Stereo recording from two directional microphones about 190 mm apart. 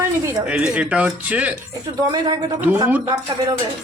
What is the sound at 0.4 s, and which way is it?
Speech, 5° right (ahead or behind).